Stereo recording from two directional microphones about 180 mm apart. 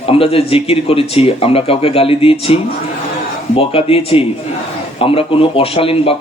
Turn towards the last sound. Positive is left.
turn(degrees=30)  # may be behind; listen again after turning